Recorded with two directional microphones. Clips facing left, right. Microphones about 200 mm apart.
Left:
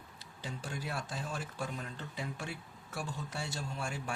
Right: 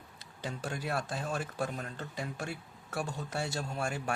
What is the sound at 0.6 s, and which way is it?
Speech, 55° right (ahead or behind).